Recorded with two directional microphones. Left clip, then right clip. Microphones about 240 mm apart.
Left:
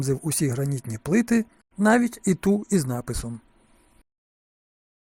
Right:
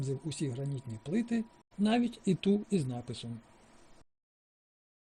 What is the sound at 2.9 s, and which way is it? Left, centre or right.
Speech, centre.